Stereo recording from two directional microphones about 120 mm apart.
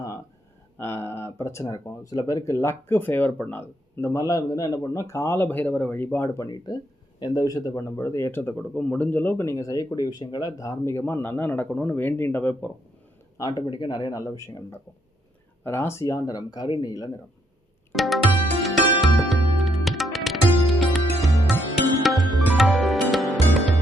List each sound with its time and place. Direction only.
0.8 s speech: 20° left (ahead or behind)
7.2 s speech: 30° left (ahead or behind); by 12.7 s 15° left (ahead or behind)
13.3 s speech: 30° left (ahead or behind)
17.9 s music: centre (ahead or behind)